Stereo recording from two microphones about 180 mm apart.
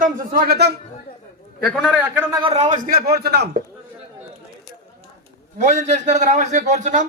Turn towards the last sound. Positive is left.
turn(degrees=-40)  # may be behind; listen again after turning